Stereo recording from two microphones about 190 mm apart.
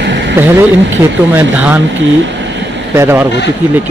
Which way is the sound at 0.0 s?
65° right (ahead or behind).